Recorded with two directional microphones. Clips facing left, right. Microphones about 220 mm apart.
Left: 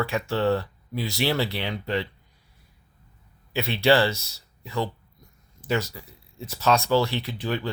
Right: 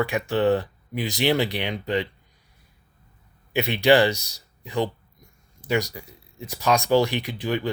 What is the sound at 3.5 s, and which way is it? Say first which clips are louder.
Speech: right 3 dB; 15° right (ahead or behind).